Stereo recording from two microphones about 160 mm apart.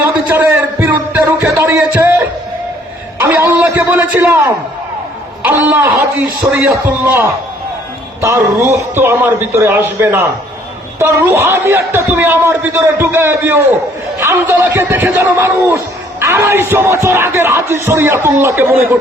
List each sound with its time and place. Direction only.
0.3 s a sound: 10° right (ahead or behind)
3.2 s a man's voice: 10° right (ahead or behind)
5.5 s music: 15° right (ahead or behind)